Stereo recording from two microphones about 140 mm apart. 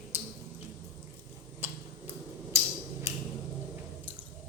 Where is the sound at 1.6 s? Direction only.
15° right (ahead or behind).